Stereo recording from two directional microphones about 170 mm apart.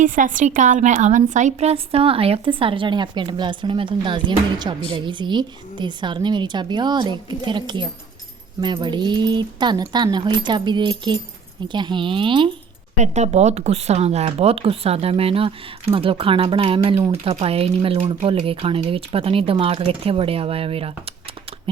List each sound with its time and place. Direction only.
0.0 s a woman's voice: 50° right (ahead or behind); by 12.5 s 30° right (ahead or behind)
13.0 s speech: 40° right (ahead or behind)